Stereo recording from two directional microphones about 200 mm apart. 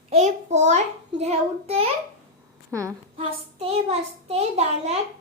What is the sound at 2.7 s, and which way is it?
Speech, 15° right (ahead or behind).